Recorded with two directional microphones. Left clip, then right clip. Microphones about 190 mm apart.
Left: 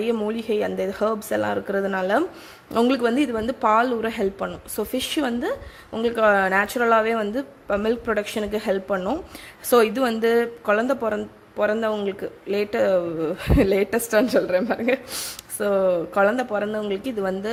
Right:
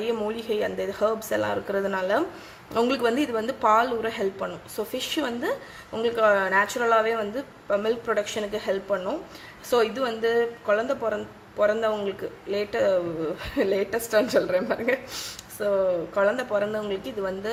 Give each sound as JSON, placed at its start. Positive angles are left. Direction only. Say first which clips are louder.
{"t": 0.0, "sound": "speech", "louder": "left 3 dB", "side_deg": 30}
{"t": 15.6, "sound": "speech", "louder": "left 3 dB", "side_deg": 40}